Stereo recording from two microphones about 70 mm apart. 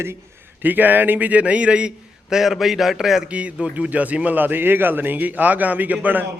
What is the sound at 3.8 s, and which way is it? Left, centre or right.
A man's voice, right.